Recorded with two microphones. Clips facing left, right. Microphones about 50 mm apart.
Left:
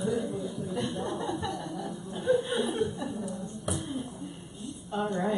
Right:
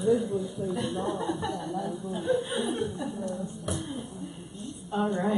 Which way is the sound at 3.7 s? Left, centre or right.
Centre.